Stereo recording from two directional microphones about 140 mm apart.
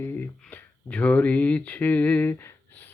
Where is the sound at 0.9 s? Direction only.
10° left (ahead or behind).